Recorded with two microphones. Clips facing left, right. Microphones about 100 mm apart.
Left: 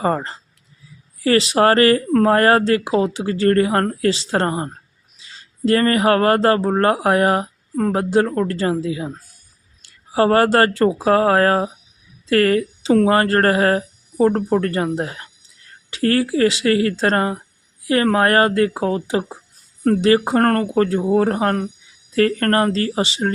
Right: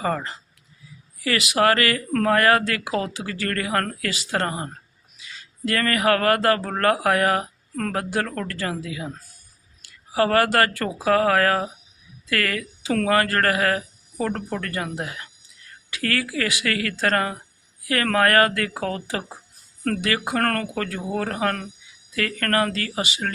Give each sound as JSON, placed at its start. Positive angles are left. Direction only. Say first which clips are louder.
{"t": 0.0, "sound": "speech", "louder": "left 5 dB", "side_deg": 35}